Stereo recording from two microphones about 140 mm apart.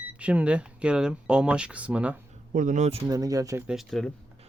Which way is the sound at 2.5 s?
65° right (ahead or behind).